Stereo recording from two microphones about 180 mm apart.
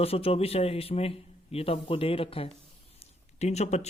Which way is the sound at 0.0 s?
35° left (ahead or behind).